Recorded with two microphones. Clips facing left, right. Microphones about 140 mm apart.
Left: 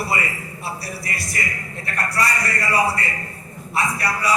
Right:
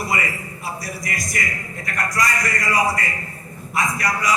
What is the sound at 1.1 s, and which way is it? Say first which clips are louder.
A man's voice: right 2 dB; 30° left (ahead or behind).